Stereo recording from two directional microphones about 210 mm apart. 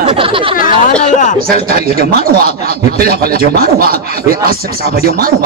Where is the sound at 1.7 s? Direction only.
45° right (ahead or behind).